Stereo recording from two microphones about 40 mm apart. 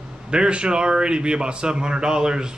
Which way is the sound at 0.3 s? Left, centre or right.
Right.